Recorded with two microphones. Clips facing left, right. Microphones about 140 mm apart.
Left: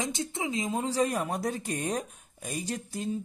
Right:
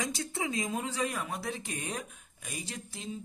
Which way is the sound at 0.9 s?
40° left (ahead or behind).